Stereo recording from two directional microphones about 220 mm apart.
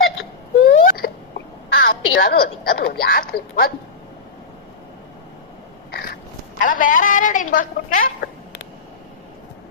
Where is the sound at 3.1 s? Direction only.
40° left (ahead or behind).